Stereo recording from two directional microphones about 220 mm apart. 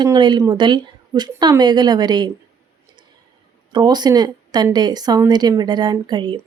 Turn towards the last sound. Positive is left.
turn(degrees=-20)  # may be behind; listen again after turning